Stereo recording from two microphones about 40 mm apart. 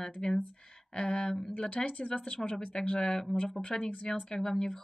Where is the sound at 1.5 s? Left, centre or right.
Left.